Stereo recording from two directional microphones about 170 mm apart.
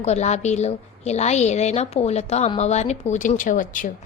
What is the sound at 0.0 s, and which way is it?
A woman's voice, 40° left (ahead or behind).